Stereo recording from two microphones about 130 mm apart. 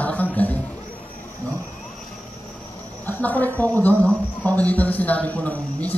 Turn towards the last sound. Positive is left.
turn(degrees=10)  # may be behind; listen again after turning